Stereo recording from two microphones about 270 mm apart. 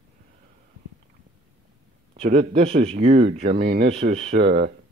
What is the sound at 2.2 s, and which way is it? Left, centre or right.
Speech, right.